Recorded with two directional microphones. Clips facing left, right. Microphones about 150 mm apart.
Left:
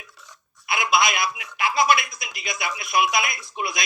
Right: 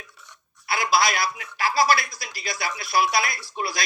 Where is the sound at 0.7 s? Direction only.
35° right (ahead or behind).